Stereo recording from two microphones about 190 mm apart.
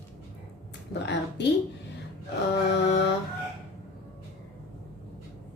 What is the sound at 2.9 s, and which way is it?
Mantra, 65° left (ahead or behind).